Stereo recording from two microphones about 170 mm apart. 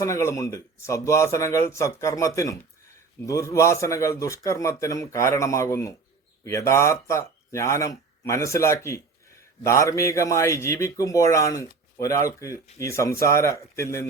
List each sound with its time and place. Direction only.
0.0 s a man's voice: 15° left (ahead or behind)